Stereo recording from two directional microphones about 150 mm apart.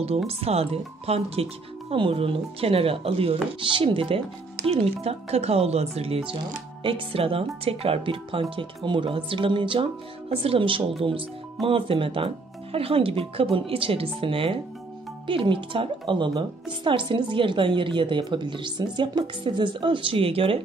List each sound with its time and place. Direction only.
0.3 s a woman's voice: 40° right (ahead or behind)